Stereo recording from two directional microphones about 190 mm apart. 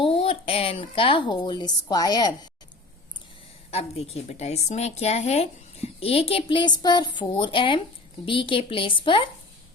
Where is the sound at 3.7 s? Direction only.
35° left (ahead or behind).